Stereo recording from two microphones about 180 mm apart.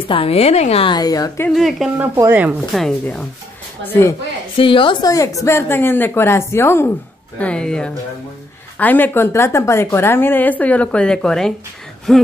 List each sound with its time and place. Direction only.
0.1 s a woman's voice: 35° left (ahead or behind)
1.5 s speech: centre (ahead or behind)
2.1 s speech: 10° right (ahead or behind)
2.7 s speech: 5° left (ahead or behind)
4.6 s a woman's voice: 30° left (ahead or behind); by 12.2 s centre (ahead or behind)